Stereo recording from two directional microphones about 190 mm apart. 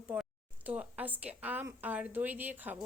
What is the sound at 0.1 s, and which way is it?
A woman's voice, 5° right (ahead or behind).